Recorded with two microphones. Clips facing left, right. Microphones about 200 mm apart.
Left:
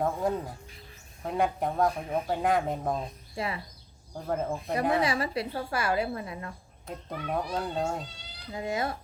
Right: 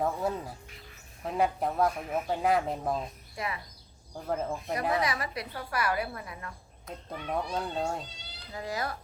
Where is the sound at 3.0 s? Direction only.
30° left (ahead or behind).